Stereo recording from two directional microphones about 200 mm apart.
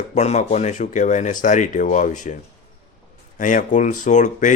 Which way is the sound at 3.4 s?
40° left (ahead or behind).